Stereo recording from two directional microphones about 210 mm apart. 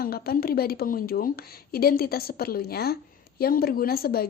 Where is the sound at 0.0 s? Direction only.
45° left (ahead or behind).